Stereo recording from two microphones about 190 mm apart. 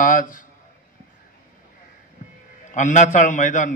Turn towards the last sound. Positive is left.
turn(degrees=40)  # may be behind; listen again after turning